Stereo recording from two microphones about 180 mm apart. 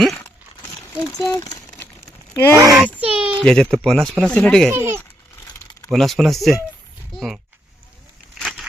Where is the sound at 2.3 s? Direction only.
15° left (ahead or behind).